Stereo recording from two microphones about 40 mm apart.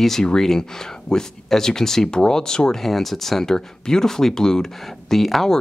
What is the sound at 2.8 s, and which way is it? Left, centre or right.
Speech, centre.